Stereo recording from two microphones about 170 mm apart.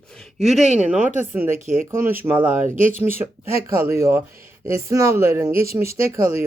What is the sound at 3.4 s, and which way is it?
Speech, 35° left (ahead or behind).